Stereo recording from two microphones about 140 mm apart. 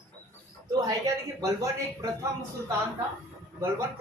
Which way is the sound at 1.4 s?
20° right (ahead or behind).